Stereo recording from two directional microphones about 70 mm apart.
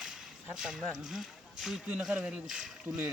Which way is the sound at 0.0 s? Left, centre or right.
Centre.